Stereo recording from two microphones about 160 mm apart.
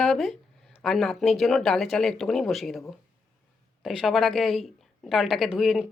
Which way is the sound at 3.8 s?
Centre (ahead or behind).